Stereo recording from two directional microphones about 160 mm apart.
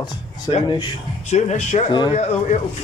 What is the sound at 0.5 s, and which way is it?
Speech, 35° left (ahead or behind).